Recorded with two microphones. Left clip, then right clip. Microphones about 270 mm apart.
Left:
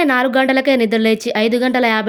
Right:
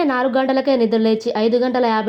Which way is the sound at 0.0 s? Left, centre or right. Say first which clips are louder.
Left 3 dB; left.